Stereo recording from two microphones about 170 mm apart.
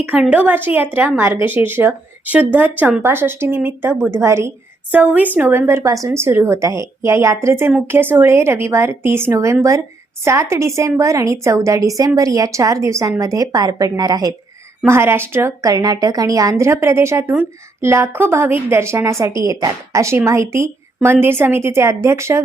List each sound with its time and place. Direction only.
0.0 s a woman's voice: 5° right (ahead or behind)